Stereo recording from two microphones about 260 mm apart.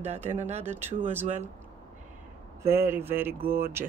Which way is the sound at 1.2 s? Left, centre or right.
Right.